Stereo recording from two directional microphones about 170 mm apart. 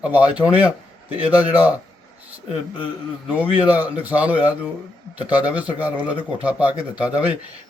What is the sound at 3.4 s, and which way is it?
A man's voice, 10° right (ahead or behind).